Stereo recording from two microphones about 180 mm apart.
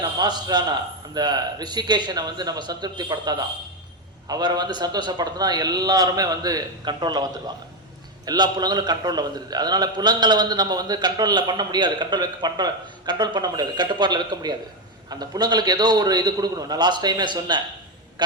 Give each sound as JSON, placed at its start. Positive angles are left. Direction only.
{"t": 0.2, "sound": "a man's voice", "side_deg": -25}